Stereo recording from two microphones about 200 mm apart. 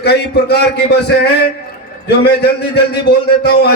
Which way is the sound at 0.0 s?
55° left (ahead or behind).